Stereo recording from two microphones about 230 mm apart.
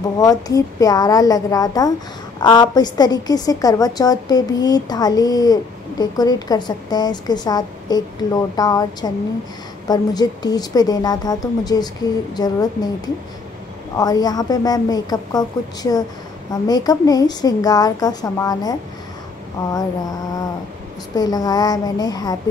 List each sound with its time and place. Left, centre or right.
0.2 s a woman's voice: centre
13.9 s a woman's voice: centre
21.1 s a woman's voice: centre